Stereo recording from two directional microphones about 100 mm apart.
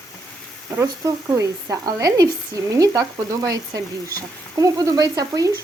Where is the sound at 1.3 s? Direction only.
35° right (ahead or behind).